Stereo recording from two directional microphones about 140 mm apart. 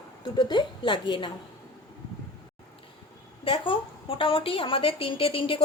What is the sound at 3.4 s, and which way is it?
A woman's voice, 40° left (ahead or behind).